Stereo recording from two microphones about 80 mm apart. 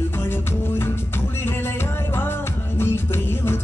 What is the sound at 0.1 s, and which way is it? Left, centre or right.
Music, left.